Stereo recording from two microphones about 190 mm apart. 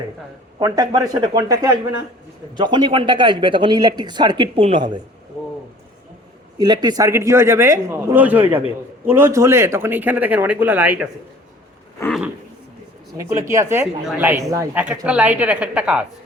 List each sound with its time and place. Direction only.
0.6 s speech: 20° right (ahead or behind)
6.6 s speech: 20° right (ahead or behind)
13.1 s speech: 15° right (ahead or behind)